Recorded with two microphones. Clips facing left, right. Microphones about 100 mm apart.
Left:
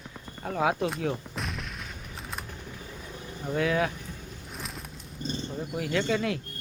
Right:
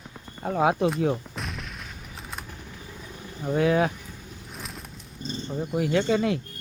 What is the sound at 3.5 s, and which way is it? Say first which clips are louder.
Speech: right 4 dB; 30° right (ahead or behind).